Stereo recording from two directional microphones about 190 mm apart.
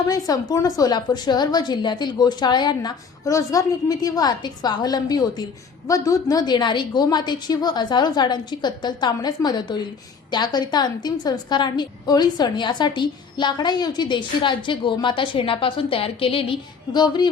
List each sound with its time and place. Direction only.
0.1 s a woman's voice: 20° left (ahead or behind)